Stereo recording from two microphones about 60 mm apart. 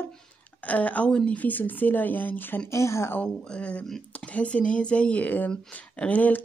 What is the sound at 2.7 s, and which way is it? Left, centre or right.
Speech, left.